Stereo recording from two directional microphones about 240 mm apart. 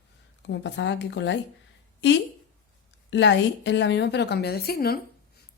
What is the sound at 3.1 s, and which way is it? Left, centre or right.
A woman's voice, left.